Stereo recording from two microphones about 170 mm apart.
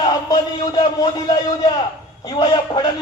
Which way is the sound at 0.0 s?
25° left (ahead or behind).